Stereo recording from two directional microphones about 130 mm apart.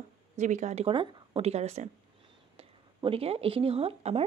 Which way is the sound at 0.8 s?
45° right (ahead or behind).